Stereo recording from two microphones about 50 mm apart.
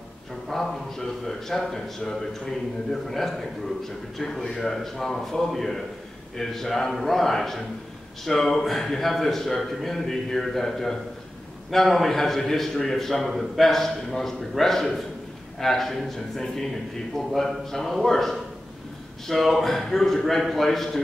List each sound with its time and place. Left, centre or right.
0.5 s a man's voice: centre